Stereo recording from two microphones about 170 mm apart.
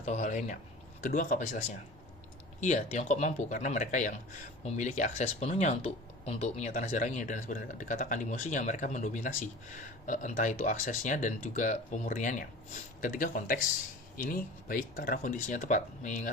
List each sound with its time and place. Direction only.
0.0 s speech: 45° left (ahead or behind)
1.0 s speech: 55° left (ahead or behind)
2.6 s speech: 45° left (ahead or behind)